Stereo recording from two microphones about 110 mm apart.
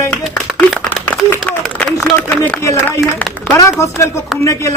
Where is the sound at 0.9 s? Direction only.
15° left (ahead or behind).